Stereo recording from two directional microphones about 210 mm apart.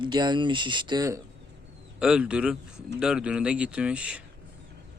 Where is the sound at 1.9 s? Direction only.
5° right (ahead or behind).